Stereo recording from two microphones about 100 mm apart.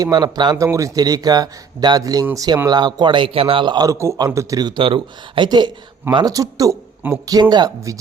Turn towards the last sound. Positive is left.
turn(degrees=-40)  # may be behind; listen again after turning